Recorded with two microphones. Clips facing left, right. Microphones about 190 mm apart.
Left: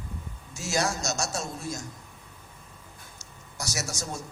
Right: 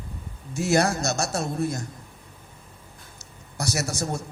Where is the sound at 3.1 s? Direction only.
60° right (ahead or behind).